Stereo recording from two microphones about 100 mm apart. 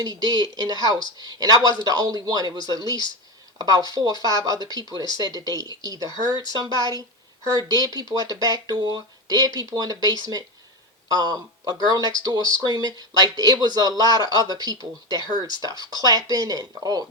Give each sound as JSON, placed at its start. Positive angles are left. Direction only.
{"t": 0.0, "sound": "speech", "side_deg": -40}